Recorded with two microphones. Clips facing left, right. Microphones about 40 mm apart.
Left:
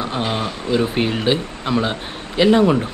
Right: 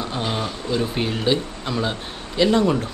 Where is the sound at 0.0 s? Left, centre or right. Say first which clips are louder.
Left 3 dB; centre.